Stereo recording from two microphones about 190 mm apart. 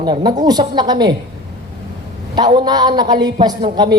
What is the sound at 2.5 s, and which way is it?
Speech, 20° right (ahead or behind).